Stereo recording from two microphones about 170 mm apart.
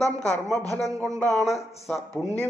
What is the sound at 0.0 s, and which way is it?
Speech, 20° right (ahead or behind).